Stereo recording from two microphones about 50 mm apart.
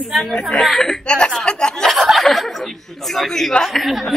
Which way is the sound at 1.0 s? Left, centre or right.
Centre.